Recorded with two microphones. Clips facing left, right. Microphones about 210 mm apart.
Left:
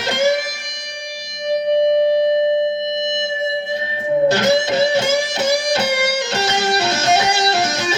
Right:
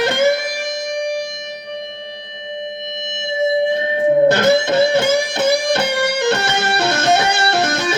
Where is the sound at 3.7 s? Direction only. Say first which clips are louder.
Right 4 dB; 55° right (ahead or behind).